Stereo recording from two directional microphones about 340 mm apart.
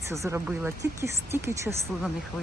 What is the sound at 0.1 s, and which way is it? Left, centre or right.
Speech, centre.